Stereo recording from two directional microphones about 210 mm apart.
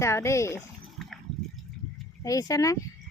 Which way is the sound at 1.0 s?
Centre (ahead or behind).